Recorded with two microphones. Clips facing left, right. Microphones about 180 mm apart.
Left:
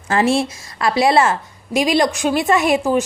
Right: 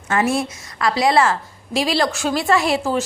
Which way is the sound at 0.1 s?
30° left (ahead or behind).